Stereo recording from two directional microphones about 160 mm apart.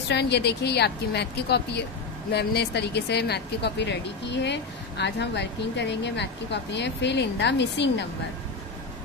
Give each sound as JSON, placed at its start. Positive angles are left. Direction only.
{"t": 0.1, "sound": "speech", "side_deg": 90}